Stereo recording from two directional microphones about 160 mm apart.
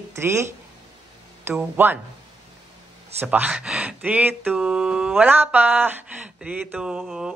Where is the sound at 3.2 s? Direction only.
10° right (ahead or behind).